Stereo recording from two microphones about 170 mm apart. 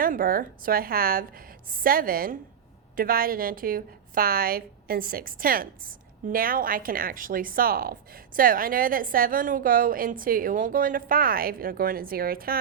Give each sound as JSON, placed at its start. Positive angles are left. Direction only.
{"t": 0.0, "sound": "a woman's voice", "side_deg": -55}